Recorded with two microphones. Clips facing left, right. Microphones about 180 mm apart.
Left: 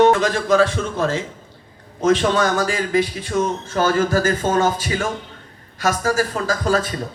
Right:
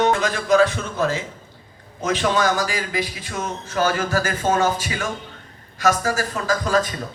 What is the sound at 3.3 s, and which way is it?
Speech, 50° left (ahead or behind).